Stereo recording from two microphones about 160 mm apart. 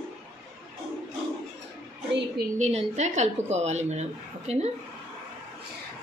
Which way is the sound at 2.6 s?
45° right (ahead or behind).